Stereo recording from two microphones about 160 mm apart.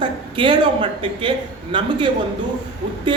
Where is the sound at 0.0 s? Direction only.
30° right (ahead or behind).